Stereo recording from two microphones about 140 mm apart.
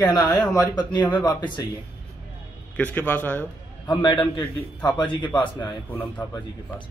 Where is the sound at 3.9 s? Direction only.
30° left (ahead or behind).